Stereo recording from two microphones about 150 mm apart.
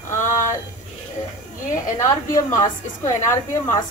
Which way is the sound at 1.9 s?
20° left (ahead or behind).